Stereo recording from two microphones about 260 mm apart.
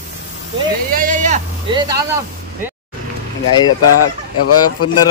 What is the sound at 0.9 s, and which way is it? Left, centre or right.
Speech, right.